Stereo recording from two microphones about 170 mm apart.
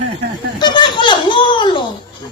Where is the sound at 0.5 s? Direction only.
25° left (ahead or behind).